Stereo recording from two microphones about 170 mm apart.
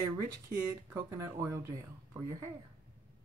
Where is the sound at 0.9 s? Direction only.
20° right (ahead or behind).